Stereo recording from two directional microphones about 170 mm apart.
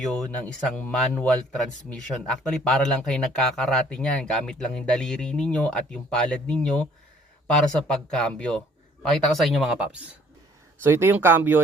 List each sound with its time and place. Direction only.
0.0 s speech: 5° left (ahead or behind)